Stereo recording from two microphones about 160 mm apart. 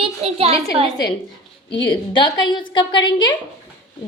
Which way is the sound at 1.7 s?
30° left (ahead or behind).